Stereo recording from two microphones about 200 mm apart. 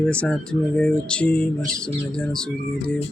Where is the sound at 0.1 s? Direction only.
5° left (ahead or behind).